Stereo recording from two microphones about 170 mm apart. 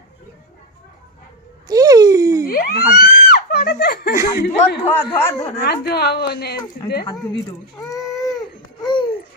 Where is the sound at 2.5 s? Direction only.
60° left (ahead or behind).